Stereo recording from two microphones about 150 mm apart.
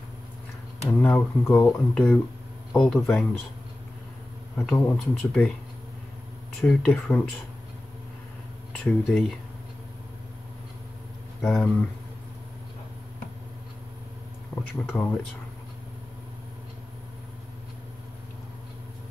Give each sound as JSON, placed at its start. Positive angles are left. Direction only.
{"t": 0.9, "sound": "speech", "side_deg": 10}
{"t": 4.6, "sound": "speech", "side_deg": 10}
{"t": 6.6, "sound": "speech", "side_deg": 5}
{"t": 8.7, "sound": "speech", "side_deg": 5}
{"t": 11.4, "sound": "speech", "side_deg": 10}
{"t": 14.5, "sound": "speech", "side_deg": 10}